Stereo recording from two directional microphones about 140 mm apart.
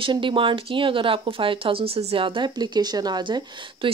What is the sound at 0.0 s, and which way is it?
Speech, 35° right (ahead or behind).